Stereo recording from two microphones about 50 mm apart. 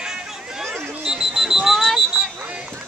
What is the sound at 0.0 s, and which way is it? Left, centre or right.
Chatter, centre.